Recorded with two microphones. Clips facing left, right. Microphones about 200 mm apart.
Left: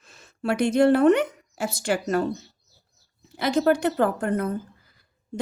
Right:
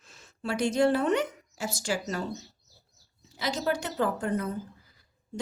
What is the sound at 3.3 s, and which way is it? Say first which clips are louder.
Speech: left 9 dB; 55° left (ahead or behind).